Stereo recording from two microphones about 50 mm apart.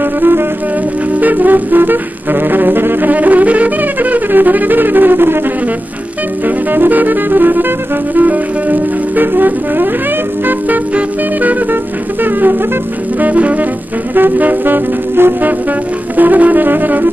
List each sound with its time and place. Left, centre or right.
0.0 s music: right
6.4 s music: right
13.2 s music: right
14.1 s music: right
16.2 s music: right